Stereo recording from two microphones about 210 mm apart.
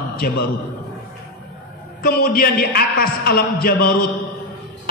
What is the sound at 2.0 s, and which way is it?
A man's voice, 45° left (ahead or behind).